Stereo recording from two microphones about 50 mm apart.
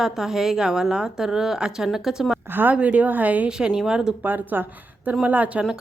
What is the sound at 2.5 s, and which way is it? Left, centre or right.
Speech, right.